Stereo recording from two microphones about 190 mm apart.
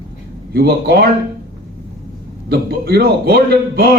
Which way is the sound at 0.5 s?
60° right (ahead or behind).